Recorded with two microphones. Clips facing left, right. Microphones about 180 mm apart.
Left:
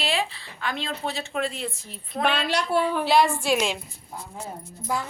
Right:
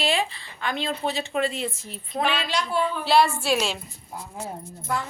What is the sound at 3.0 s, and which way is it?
Speech, 15° left (ahead or behind).